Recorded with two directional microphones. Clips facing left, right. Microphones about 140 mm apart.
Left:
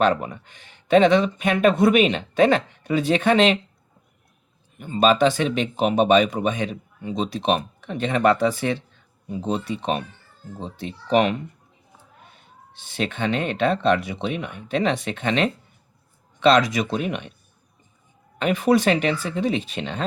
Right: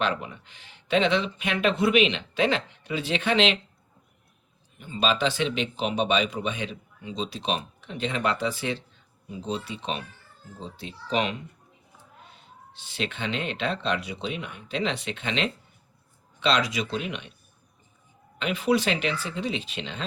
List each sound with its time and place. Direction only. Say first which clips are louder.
0.0 s speech: left 8 dB; 45° left (ahead or behind)
4.8 s speech: left 8 dB; 50° left (ahead or behind)
12.9 s speech: left 6 dB; 50° left (ahead or behind)
18.3 s speech: left 5 dB; 50° left (ahead or behind)